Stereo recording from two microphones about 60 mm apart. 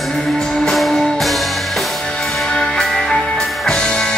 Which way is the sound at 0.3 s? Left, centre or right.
Centre.